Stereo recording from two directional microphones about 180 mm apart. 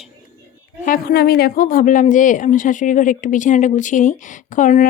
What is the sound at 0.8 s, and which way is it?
Speech, 55° left (ahead or behind).